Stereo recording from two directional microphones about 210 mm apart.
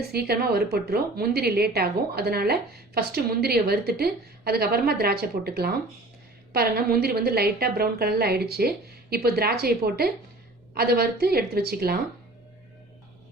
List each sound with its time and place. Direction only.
0.0 s a woman's voice: 50° right (ahead or behind)